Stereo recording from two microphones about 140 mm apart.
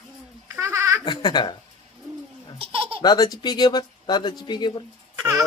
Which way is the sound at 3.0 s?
25° left (ahead or behind).